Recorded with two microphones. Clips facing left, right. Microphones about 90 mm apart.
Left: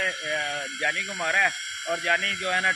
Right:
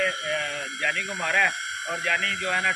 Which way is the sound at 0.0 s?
40° right (ahead or behind).